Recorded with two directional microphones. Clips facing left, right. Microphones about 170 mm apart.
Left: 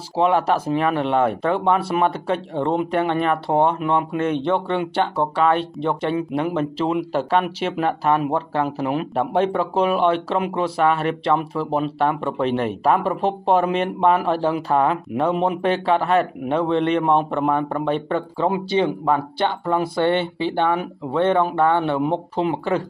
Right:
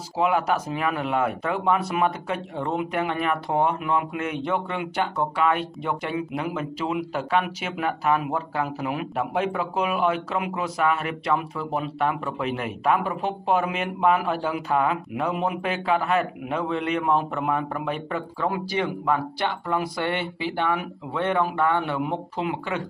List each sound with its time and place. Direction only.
0.2 s a man's voice: 30° left (ahead or behind)